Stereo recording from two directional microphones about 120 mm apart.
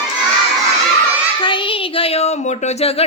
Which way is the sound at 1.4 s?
45° left (ahead or behind).